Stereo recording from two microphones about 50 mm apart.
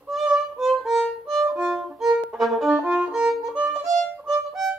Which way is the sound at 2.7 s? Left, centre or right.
Right.